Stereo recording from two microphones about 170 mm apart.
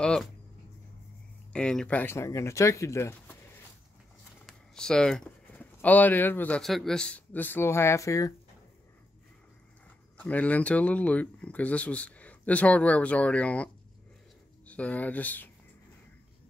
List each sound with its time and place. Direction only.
0.0 s a sound: 5° left (ahead or behind)
1.5 s speech: 5° left (ahead or behind)
4.5 s speech: 5° left (ahead or behind)
10.1 s speech: 10° left (ahead or behind)
14.7 s speech: 10° left (ahead or behind)